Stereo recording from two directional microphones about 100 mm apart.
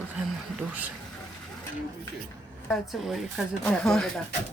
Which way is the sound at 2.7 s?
Centre (ahead or behind).